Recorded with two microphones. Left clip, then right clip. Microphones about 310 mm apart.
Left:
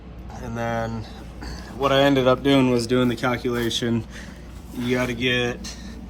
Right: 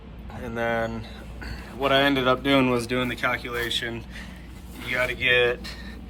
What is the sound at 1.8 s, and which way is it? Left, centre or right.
Speech, centre.